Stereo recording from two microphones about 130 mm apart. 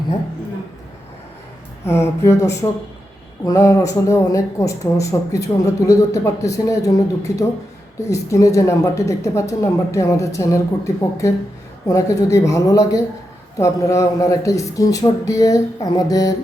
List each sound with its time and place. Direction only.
1.8 s speech: 20° left (ahead or behind)